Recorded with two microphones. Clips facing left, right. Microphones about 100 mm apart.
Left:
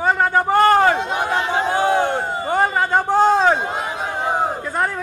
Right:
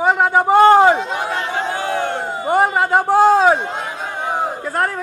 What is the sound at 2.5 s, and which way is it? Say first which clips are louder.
A man's voice: right 3 dB; 10° right (ahead or behind).